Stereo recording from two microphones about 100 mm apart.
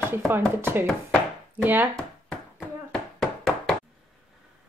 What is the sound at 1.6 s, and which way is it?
Speech, 20° right (ahead or behind).